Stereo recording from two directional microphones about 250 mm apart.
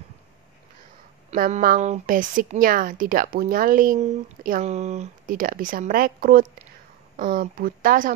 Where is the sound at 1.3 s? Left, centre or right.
Right.